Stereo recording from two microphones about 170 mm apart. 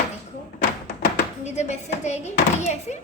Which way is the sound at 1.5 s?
40° left (ahead or behind).